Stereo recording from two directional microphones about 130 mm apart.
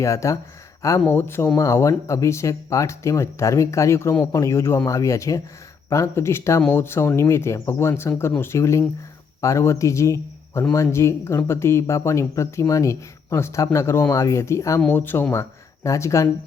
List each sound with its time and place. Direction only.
0.0 s speech: 25° left (ahead or behind)